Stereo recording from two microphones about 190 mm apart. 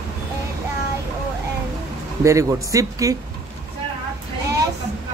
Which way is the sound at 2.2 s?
15° right (ahead or behind).